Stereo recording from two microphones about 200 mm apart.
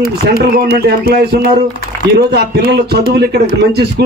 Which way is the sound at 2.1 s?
55° right (ahead or behind).